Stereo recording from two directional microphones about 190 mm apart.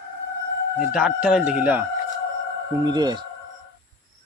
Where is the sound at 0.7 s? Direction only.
5° right (ahead or behind).